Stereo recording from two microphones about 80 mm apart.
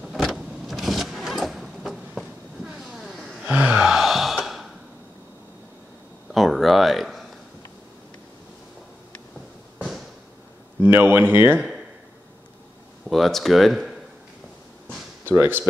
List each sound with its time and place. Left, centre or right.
0.0 s vehicle: centre
3.4 s gasp: centre
3.9 s gasp: centre
6.3 s a sound: centre
10.8 s speech: right
13.1 s speech: centre
15.2 s speech: right